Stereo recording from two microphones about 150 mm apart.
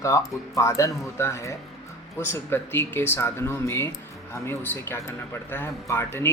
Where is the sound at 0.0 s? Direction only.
20° left (ahead or behind).